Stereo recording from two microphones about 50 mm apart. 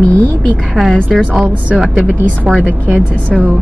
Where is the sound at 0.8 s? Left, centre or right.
Right.